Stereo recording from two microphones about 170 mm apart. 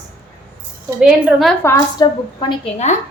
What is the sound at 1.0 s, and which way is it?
Speech, 5° right (ahead or behind).